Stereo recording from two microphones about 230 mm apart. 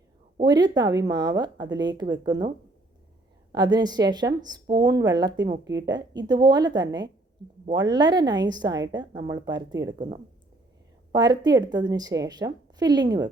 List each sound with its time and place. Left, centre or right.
0.3 s a woman's voice: centre
3.5 s a woman's voice: centre